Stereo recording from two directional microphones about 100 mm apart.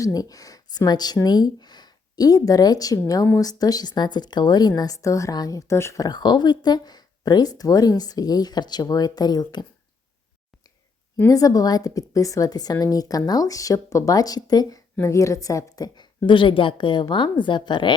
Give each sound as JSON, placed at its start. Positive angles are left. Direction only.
{"t": 0.0, "sound": "a woman's voice", "side_deg": 35}
{"t": 6.0, "sound": "speech", "side_deg": 45}
{"t": 11.3, "sound": "a woman's voice", "side_deg": 35}
{"t": 15.0, "sound": "speech", "side_deg": 30}